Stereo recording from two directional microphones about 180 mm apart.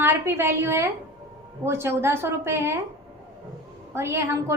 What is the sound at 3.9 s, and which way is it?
Speech, 15° right (ahead or behind).